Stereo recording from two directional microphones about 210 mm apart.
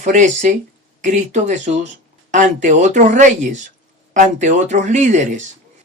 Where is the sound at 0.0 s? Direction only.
35° right (ahead or behind).